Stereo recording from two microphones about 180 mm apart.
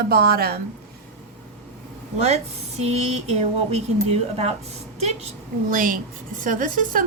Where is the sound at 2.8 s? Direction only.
35° right (ahead or behind).